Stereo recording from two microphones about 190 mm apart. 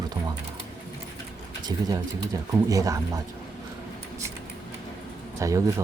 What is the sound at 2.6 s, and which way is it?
Speech, 20° right (ahead or behind).